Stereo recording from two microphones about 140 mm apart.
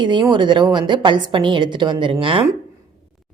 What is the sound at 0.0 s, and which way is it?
A woman's voice, 30° right (ahead or behind).